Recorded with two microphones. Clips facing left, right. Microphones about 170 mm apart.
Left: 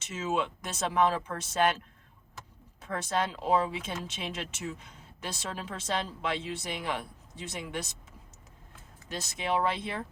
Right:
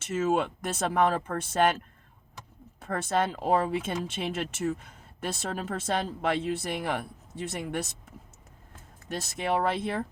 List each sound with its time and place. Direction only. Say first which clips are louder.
0.1 s speech: right 5 dB; 50° right (ahead or behind)
2.8 s speech: right 3 dB; 55° right (ahead or behind)